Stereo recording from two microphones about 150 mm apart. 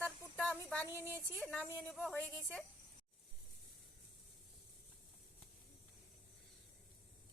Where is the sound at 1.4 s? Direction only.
5° left (ahead or behind).